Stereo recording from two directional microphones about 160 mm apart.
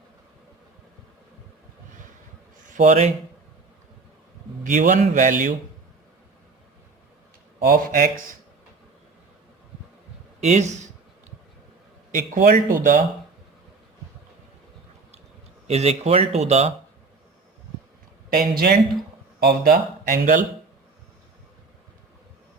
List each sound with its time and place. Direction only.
2.6 s speech: 50° right (ahead or behind)
4.6 s a man's voice: 55° right (ahead or behind)
7.7 s speech: 65° right (ahead or behind)
10.4 s a man's voice: 45° right (ahead or behind)
12.1 s speech: 55° right (ahead or behind)
15.6 s speech: 40° right (ahead or behind)
18.3 s speech: 75° right (ahead or behind); by 20.4 s 55° right (ahead or behind)